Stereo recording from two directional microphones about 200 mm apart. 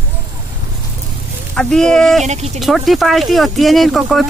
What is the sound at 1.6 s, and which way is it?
Speech, 5° left (ahead or behind).